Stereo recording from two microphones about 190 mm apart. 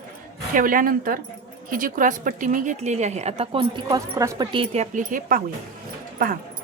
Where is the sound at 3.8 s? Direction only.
20° right (ahead or behind).